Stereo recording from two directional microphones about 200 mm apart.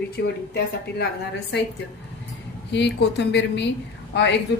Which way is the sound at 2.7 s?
60° left (ahead or behind).